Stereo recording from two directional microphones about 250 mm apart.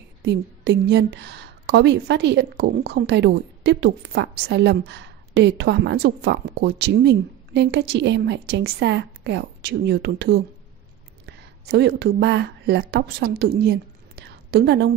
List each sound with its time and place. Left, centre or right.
0.2 s a woman's voice: right